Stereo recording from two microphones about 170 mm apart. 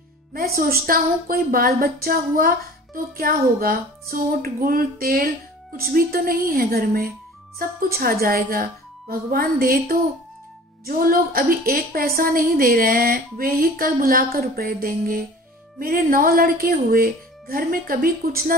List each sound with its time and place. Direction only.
0.3 s speech: 60° right (ahead or behind)
11.0 s speech: 60° right (ahead or behind)